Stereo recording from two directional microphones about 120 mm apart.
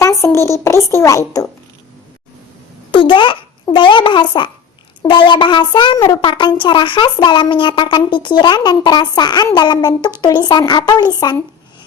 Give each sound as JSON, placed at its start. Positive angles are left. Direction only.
{"t": 0.0, "sound": "a woman's voice", "side_deg": 25}
{"t": 2.9, "sound": "a child's voice", "side_deg": 45}